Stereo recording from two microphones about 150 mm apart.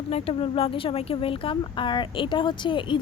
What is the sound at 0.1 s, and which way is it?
Speech, 40° left (ahead or behind).